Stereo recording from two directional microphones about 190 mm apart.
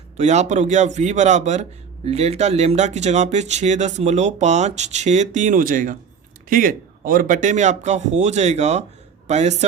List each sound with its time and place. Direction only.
0.2 s speech: 35° right (ahead or behind)